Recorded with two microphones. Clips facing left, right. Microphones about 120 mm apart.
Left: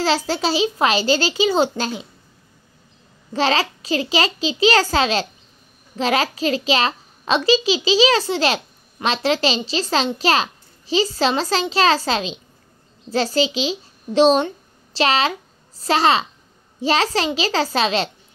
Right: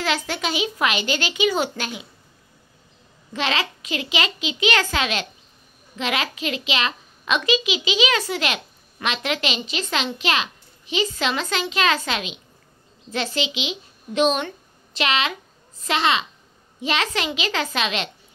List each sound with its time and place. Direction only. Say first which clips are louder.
0.0 s a child's voice: left 5 dB; 30° left (ahead or behind)
3.3 s a child's voice: left 5 dB; 35° left (ahead or behind)